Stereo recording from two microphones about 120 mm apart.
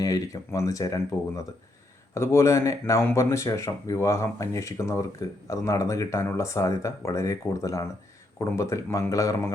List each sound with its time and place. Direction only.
0.0 s speech: 30° left (ahead or behind)